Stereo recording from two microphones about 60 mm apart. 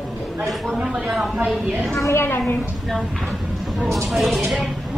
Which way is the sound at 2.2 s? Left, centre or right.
Left.